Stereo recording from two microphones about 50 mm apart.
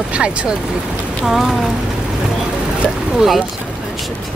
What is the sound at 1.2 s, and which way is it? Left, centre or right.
Speech, centre.